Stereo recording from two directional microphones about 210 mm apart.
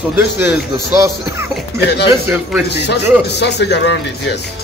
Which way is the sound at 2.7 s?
55° left (ahead or behind).